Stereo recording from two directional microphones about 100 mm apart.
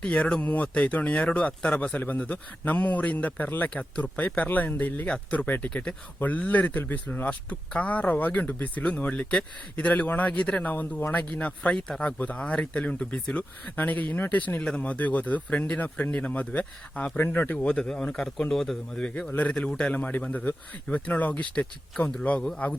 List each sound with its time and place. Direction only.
0.0 s speech: 10° left (ahead or behind)